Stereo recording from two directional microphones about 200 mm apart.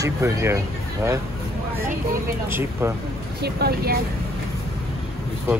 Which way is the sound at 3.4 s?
55° right (ahead or behind).